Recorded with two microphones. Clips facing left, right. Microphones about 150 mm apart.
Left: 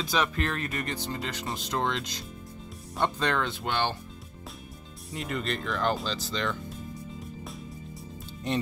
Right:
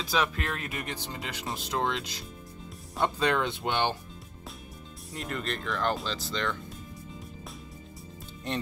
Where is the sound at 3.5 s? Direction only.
20° right (ahead or behind).